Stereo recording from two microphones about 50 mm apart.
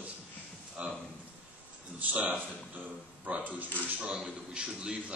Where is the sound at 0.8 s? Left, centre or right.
Right.